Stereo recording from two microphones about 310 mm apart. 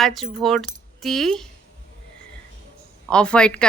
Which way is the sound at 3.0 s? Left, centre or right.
Centre.